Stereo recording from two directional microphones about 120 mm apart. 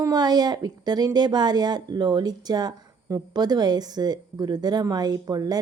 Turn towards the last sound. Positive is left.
turn(degrees=-30)  # may be behind; listen again after turning